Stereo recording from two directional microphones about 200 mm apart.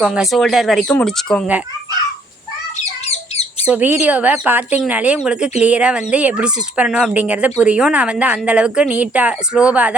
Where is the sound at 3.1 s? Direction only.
30° left (ahead or behind).